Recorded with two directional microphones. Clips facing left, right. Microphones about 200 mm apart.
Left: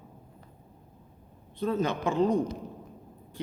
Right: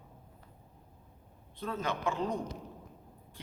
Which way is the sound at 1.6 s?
25° left (ahead or behind).